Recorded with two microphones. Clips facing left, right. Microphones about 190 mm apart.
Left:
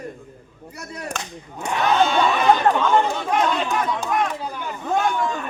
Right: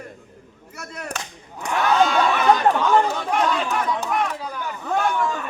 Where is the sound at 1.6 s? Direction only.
25° left (ahead or behind).